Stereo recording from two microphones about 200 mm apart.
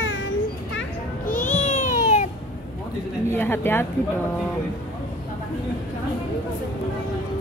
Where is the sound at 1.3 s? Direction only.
40° left (ahead or behind).